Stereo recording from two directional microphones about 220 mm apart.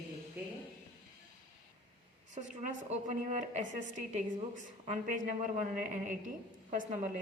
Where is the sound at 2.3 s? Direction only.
35° right (ahead or behind).